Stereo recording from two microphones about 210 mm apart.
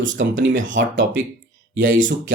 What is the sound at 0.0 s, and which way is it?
Speech, 65° right (ahead or behind).